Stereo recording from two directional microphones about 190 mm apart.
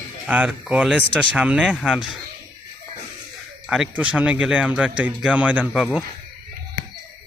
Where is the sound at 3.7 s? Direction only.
5° right (ahead or behind).